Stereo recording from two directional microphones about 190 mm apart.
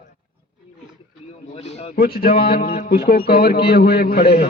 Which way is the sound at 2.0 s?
55° left (ahead or behind).